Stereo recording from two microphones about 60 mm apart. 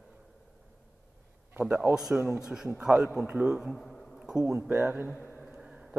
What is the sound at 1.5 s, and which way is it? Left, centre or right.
Speech, right.